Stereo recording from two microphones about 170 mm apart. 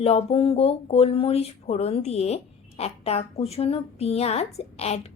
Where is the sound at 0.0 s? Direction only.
35° left (ahead or behind).